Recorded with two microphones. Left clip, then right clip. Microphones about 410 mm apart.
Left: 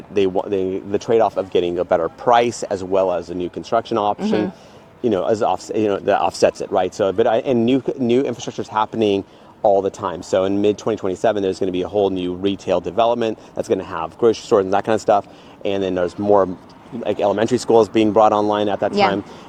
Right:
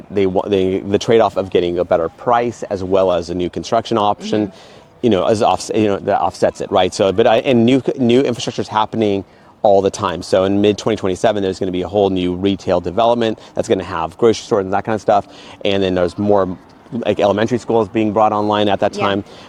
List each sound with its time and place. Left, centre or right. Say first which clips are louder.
0.1 s speech: right 3 dB; right
2.9 s speech: right 4 dB; right
6.1 s speech: right 1 dB; right
14.5 s speech: left 1 dB; right
15.6 s speech: right 4 dB; right
17.5 s speech: left 2 dB; right